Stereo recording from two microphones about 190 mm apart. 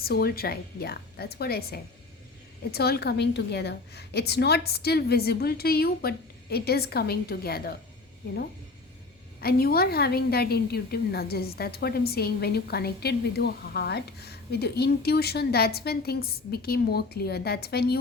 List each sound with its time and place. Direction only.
0.0 s a woman's voice: 55° left (ahead or behind)
9.4 s a woman's voice: 55° left (ahead or behind)